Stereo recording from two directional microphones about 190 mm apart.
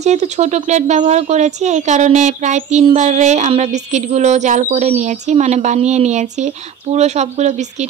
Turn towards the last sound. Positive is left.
turn(degrees=-35)  # may be behind; listen again after turning